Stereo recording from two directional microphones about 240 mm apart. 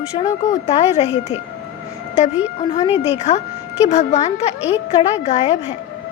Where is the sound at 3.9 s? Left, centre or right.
Left.